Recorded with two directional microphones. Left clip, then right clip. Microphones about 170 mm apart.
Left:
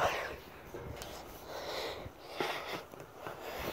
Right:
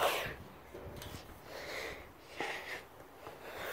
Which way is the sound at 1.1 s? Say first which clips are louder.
Left 4 dB; centre (ahead or behind).